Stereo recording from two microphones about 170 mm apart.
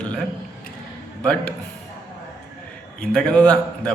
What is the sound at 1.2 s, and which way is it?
Speech, 5° left (ahead or behind).